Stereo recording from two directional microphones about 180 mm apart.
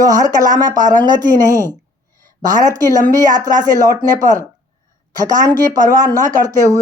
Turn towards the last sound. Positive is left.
turn(degrees=-20)  # may be behind; listen again after turning